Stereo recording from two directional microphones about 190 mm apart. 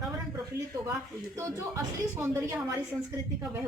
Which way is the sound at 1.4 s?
15° right (ahead or behind).